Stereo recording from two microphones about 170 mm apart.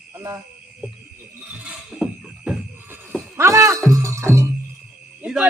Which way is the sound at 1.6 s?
5° right (ahead or behind).